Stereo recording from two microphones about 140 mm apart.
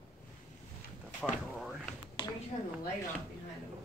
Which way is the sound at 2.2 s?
35° left (ahead or behind).